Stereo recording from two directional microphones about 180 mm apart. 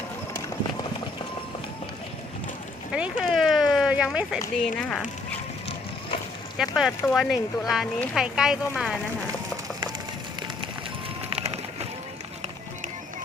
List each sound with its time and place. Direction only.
2.9 s a sound: 5° right (ahead or behind)
4.6 s speech: 5° left (ahead or behind)
6.6 s speech: centre (ahead or behind)
11.3 s bird: 35° right (ahead or behind)